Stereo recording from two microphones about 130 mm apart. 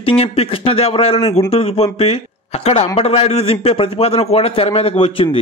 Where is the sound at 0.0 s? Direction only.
50° left (ahead or behind).